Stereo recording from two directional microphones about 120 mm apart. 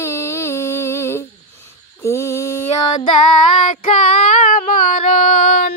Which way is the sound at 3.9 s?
70° left (ahead or behind).